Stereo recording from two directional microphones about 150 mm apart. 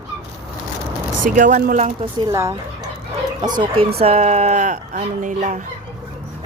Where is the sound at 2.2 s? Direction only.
25° right (ahead or behind).